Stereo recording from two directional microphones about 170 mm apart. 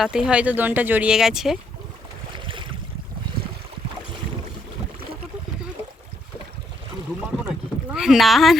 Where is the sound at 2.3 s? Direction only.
30° right (ahead or behind).